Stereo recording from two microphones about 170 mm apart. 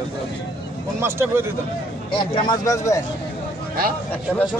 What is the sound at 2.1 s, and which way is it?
Speech, 20° left (ahead or behind).